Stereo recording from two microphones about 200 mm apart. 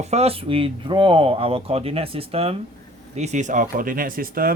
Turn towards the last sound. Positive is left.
turn(degrees=-45)  # may be behind; listen again after turning